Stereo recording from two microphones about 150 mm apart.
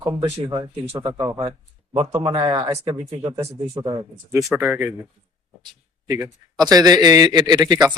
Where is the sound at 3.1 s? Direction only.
40° right (ahead or behind).